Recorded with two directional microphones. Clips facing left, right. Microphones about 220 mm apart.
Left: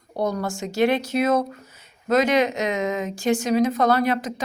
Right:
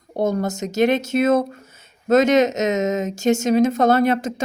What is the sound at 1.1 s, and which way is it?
Speech, 50° right (ahead or behind).